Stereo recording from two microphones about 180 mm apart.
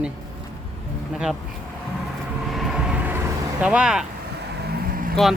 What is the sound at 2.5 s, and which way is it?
Vehicle, centre (ahead or behind).